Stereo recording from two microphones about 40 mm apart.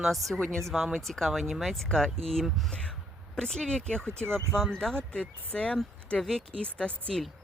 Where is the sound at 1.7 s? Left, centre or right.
Centre.